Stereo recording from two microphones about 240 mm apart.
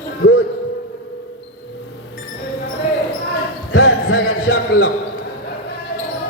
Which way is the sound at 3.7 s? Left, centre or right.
Left.